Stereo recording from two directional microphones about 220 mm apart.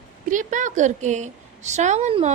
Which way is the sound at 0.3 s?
35° right (ahead or behind).